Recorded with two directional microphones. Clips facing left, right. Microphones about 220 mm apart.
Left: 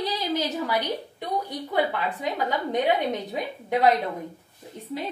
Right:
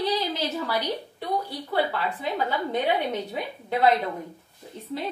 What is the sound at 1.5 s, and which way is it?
A woman's voice, 20° left (ahead or behind).